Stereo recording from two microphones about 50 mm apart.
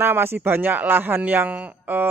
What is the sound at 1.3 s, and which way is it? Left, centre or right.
Speech, right.